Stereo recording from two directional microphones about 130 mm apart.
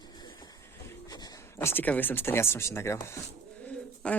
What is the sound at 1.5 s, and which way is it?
Speech, 15° left (ahead or behind).